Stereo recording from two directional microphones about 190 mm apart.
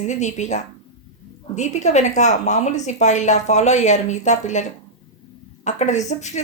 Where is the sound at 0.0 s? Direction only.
40° left (ahead or behind).